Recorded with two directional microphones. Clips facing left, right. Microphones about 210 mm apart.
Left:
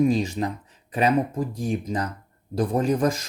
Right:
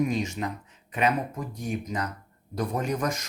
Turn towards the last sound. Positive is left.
turn(degrees=30)  # may be behind; listen again after turning